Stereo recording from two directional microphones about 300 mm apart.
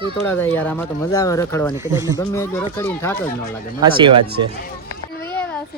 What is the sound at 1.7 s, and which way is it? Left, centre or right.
Speech, centre.